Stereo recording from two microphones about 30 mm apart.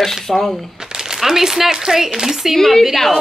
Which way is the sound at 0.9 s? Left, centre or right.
Centre.